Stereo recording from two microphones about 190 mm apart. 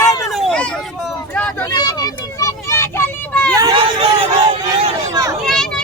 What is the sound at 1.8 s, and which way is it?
Vehicle, 20° left (ahead or behind).